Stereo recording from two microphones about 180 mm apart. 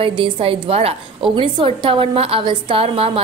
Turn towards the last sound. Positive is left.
turn(degrees=-30)  # may be behind; listen again after turning